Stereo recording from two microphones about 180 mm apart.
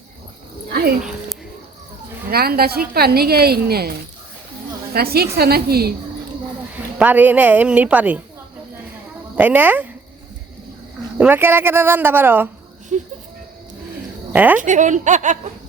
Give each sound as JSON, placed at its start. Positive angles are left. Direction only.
{"t": 0.7, "sound": "speech", "side_deg": -60}
{"t": 2.3, "sound": "a woman's voice", "side_deg": -60}
{"t": 7.0, "sound": "a woman's voice", "side_deg": -10}
{"t": 9.3, "sound": "a woman's voice", "side_deg": -10}
{"t": 11.2, "sound": "a woman's voice", "side_deg": -10}
{"t": 12.9, "sound": "speech", "side_deg": -40}
{"t": 14.3, "sound": "a woman's voice", "side_deg": -10}
{"t": 14.6, "sound": "speech", "side_deg": -45}